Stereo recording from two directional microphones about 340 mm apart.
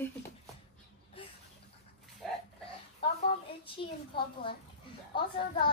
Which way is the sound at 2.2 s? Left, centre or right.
Centre.